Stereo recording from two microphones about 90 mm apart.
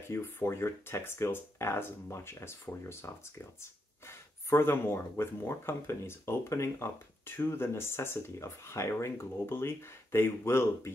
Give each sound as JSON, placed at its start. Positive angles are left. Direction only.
{"t": 0.1, "sound": "speech", "side_deg": 30}